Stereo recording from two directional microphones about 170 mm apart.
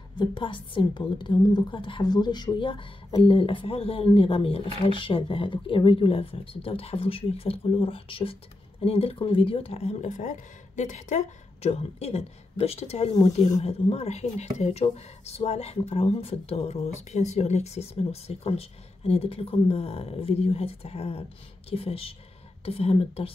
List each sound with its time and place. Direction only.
0.1 s speech: 30° left (ahead or behind)